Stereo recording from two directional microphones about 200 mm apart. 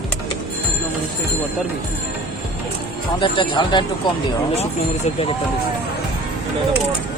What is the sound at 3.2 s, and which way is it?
Speech, 25° left (ahead or behind).